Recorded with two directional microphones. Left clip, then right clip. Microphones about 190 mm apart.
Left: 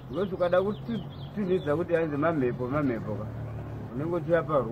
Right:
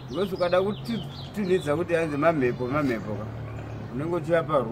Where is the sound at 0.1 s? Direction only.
5° left (ahead or behind).